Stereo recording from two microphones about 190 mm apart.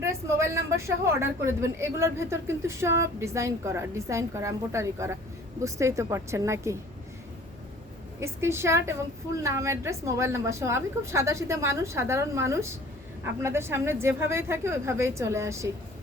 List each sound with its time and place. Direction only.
0.0 s a woman's voice: 15° right (ahead or behind)
8.2 s a woman's voice: 15° right (ahead or behind)